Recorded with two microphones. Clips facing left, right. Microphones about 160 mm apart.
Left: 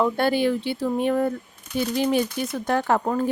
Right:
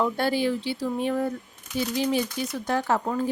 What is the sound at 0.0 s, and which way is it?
Speech, 60° left (ahead or behind).